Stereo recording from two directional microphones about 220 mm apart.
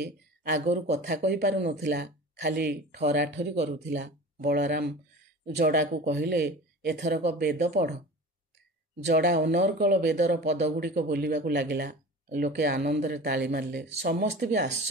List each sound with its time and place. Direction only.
0.0 s a sound: 50° right (ahead or behind)
0.7 s speech: 30° right (ahead or behind)
1.1 s speech: 50° right (ahead or behind)
7.2 s speech: 30° right (ahead or behind)
7.6 s speech: 45° right (ahead or behind)
9.0 s speech: 50° right (ahead or behind)
14.0 s speech: 40° right (ahead or behind)